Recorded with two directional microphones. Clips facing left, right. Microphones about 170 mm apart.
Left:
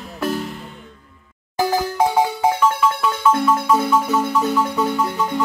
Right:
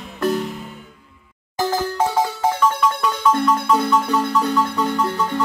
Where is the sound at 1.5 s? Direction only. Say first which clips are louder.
Left 2 dB; 10° left (ahead or behind).